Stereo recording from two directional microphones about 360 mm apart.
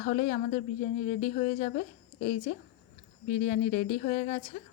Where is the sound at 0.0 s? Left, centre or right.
Left.